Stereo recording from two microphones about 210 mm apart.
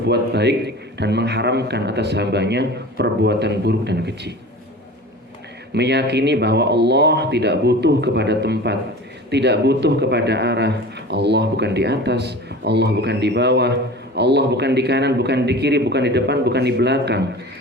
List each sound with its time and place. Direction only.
0.0 s a man's voice: 55° right (ahead or behind)
5.7 s a man's voice: 55° right (ahead or behind)